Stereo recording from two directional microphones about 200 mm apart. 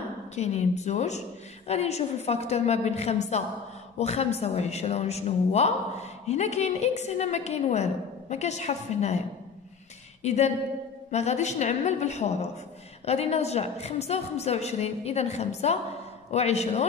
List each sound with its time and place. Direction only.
0.4 s a woman's voice: 35° left (ahead or behind)
10.2 s a woman's voice: 35° left (ahead or behind)